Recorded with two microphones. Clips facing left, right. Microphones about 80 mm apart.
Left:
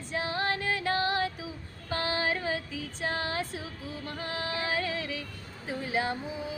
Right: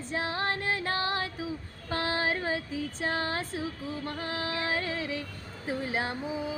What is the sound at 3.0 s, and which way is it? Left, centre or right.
Speech, right.